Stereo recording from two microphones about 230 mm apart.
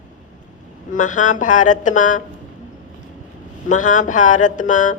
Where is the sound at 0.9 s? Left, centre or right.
Left.